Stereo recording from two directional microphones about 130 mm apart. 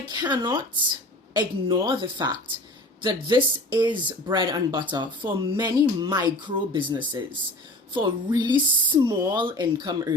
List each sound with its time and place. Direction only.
0.0 s speech: 35° right (ahead or behind)
9.0 s speech: 25° right (ahead or behind)
9.4 s speech: 35° right (ahead or behind)